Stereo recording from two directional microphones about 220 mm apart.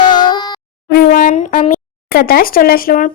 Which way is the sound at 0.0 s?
20° left (ahead or behind).